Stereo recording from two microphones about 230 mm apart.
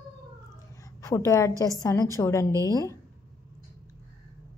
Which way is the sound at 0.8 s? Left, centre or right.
Centre.